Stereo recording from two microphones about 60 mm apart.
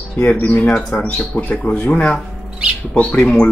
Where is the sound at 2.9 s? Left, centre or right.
Centre.